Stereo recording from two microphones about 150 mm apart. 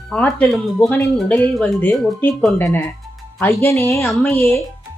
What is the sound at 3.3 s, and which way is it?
Speech, 15° left (ahead or behind).